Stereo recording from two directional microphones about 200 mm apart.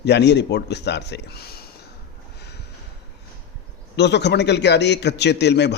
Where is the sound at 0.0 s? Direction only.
60° left (ahead or behind).